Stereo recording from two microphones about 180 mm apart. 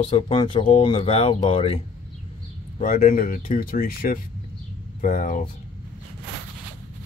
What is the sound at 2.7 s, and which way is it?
Speech, 45° left (ahead or behind).